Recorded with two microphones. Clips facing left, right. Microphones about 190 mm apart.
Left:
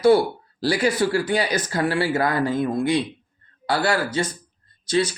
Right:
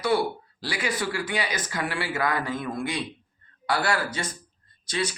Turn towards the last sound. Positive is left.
turn(degrees=30)  # may be behind; listen again after turning